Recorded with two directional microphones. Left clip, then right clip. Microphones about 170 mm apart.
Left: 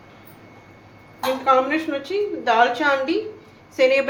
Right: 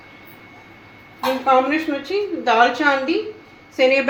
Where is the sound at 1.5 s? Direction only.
25° right (ahead or behind).